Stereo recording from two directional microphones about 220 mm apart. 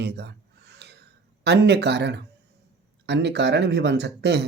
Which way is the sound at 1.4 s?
50° right (ahead or behind).